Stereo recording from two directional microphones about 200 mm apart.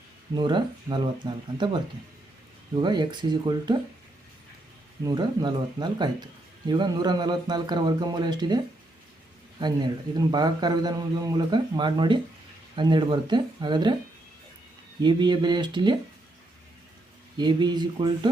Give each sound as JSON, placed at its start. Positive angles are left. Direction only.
{"t": 0.3, "sound": "a man's voice", "side_deg": -20}
{"t": 5.0, "sound": "a man's voice", "side_deg": -20}
{"t": 15.0, "sound": "a man's voice", "side_deg": -20}
{"t": 17.3, "sound": "a man's voice", "side_deg": -20}